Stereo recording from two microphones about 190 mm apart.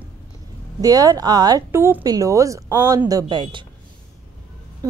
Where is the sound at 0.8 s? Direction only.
20° right (ahead or behind).